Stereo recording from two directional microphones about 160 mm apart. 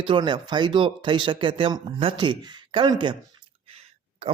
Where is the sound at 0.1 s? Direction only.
30° right (ahead or behind).